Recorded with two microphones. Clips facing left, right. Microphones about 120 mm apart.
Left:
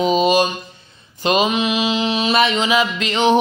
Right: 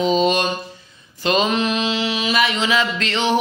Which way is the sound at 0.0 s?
10° left (ahead or behind).